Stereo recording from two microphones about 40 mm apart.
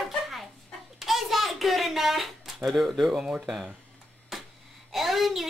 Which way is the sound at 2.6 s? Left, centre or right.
Centre.